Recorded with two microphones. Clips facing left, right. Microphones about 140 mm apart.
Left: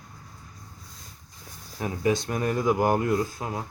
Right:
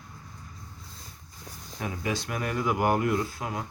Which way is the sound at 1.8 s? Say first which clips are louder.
Left 6 dB; 30° left (ahead or behind).